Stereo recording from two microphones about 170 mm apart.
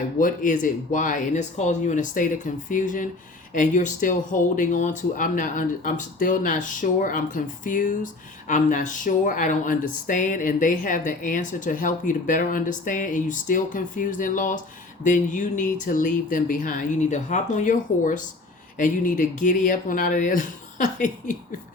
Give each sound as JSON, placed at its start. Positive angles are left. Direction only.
{"t": 0.2, "sound": "speech", "side_deg": 50}